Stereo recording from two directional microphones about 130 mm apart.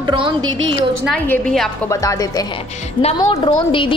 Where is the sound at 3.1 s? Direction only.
40° left (ahead or behind).